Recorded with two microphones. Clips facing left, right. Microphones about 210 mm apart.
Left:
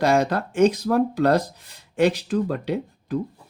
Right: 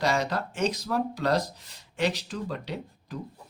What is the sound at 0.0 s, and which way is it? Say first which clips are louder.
Speech: left 7 dB; 55° left (ahead or behind).